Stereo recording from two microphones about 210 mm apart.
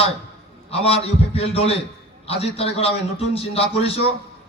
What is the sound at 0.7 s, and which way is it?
A man's voice, 30° left (ahead or behind).